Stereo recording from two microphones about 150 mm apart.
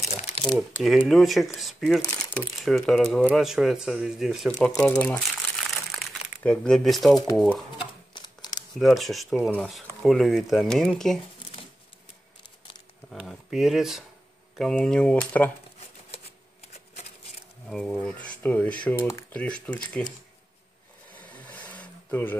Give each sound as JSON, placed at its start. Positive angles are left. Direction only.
{"t": 0.6, "sound": "speech", "side_deg": -5}
{"t": 4.6, "sound": "crumpling", "side_deg": 5}
{"t": 7.3, "sound": "speech", "side_deg": 0}
{"t": 8.1, "sound": "a sound", "side_deg": 25}
{"t": 8.7, "sound": "speech", "side_deg": 0}
{"t": 13.1, "sound": "speech", "side_deg": 0}
{"t": 17.6, "sound": "speech", "side_deg": 5}
{"t": 21.1, "sound": "a sound", "side_deg": 10}